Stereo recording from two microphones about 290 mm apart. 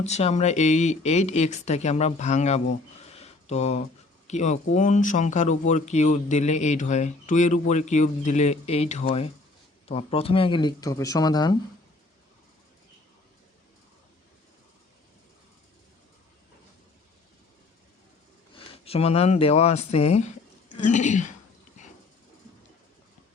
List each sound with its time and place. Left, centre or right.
0.0 s speech: left
18.5 s speech: centre